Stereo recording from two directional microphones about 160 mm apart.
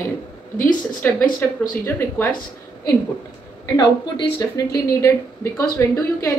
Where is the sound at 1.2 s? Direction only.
60° left (ahead or behind).